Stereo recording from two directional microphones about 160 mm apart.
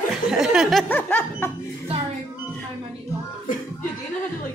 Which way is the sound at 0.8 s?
10° left (ahead or behind).